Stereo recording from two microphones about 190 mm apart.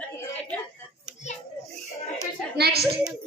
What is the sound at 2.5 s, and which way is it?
Speech, 55° right (ahead or behind).